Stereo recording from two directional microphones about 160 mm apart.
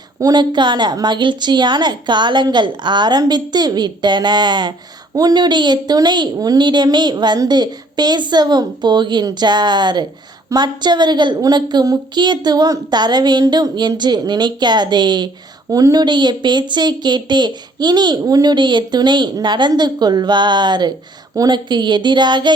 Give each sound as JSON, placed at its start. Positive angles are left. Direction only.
{"t": 0.2, "sound": "speech", "side_deg": -25}